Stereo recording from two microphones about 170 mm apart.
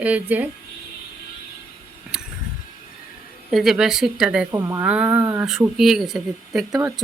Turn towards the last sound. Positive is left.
turn(degrees=0)  # may be behind; listen again after turning